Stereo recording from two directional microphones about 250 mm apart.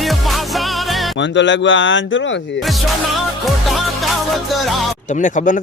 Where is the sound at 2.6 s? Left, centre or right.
Centre.